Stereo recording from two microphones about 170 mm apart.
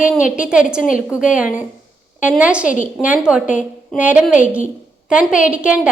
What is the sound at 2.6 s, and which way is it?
Speech, 50° left (ahead or behind).